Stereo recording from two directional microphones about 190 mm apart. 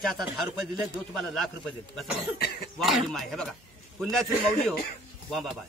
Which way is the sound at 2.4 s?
55° left (ahead or behind).